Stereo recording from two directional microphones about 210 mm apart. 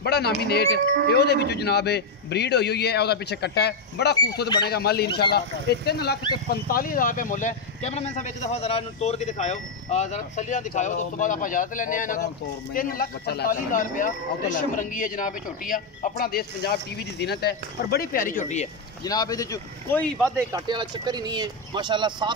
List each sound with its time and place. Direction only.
0.0 s a man's voice: 50° left (ahead or behind); by 18.7 s 35° left (ahead or behind)
19.0 s speech: 15° left (ahead or behind)
20.3 s speech: 20° right (ahead or behind)